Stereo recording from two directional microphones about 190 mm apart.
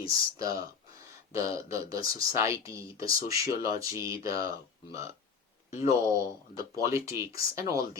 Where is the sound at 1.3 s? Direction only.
15° right (ahead or behind).